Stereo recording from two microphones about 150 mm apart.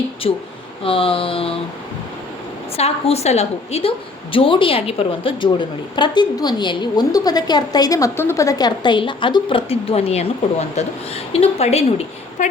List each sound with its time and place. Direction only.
0.2 s a woman's voice: 45° left (ahead or behind)
2.7 s a woman's voice: 45° left (ahead or behind)